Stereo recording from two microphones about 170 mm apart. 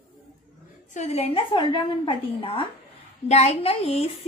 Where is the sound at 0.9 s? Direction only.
40° left (ahead or behind).